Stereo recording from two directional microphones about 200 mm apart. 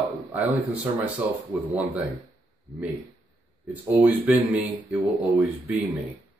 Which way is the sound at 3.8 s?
10° right (ahead or behind).